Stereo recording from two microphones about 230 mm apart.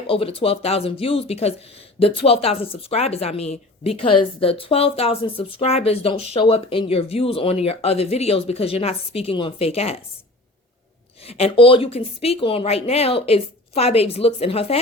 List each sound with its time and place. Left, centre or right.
0.1 s speech: left
11.2 s speech: left